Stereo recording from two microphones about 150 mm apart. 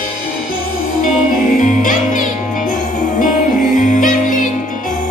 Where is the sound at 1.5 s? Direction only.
60° left (ahead or behind).